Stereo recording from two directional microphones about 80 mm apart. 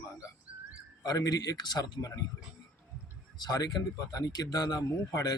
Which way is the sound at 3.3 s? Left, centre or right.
Left.